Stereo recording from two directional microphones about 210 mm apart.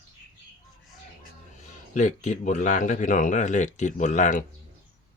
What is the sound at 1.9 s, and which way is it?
Speech, 35° left (ahead or behind).